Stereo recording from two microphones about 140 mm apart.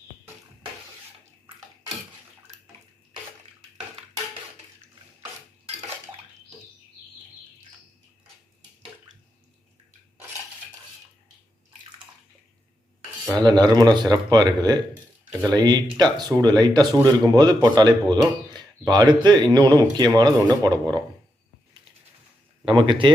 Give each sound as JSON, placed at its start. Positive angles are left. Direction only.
{"t": 13.3, "sound": "speech", "side_deg": -30}
{"t": 22.6, "sound": "speech", "side_deg": -35}